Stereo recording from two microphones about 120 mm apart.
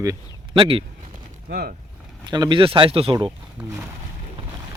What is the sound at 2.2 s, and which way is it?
Speech, 35° right (ahead or behind).